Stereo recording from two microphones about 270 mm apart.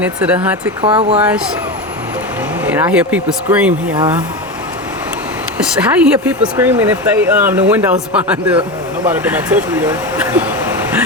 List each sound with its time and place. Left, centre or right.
0.0 s speech: centre
0.8 s speech: centre
2.6 s speech: centre
3.9 s speech: centre
5.8 s speech: centre